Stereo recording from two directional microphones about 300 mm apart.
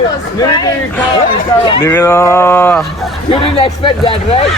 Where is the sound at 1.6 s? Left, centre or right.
Centre.